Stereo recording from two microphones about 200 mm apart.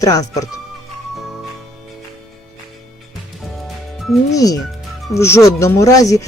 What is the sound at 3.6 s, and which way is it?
Music, centre (ahead or behind).